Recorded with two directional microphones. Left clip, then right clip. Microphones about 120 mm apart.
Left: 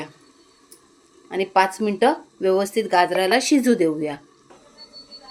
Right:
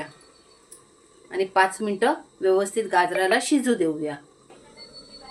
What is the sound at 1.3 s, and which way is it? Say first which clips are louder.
Speech: left 2 dB; 80° left.